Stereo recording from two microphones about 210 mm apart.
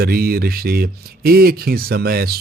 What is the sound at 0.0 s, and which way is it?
Speech, 45° right (ahead or behind).